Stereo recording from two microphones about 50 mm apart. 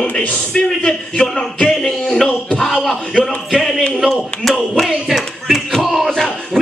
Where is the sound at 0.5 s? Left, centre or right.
Centre.